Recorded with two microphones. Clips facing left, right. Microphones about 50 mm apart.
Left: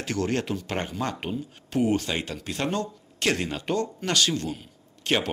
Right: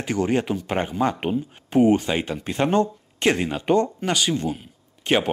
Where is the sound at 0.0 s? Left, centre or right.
Centre.